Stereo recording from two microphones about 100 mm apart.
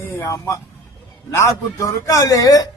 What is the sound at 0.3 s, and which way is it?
A man's voice, 35° left (ahead or behind).